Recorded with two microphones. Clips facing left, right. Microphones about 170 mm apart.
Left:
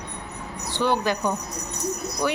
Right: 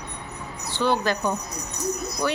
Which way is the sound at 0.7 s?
15° left (ahead or behind).